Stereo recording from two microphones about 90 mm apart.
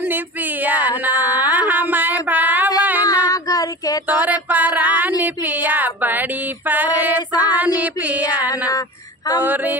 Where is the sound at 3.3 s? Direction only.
45° left (ahead or behind).